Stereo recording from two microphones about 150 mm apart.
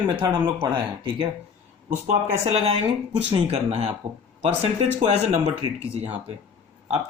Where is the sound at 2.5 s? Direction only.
45° right (ahead or behind).